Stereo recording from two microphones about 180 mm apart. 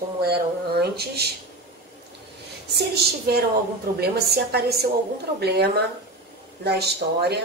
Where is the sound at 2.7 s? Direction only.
60° right (ahead or behind).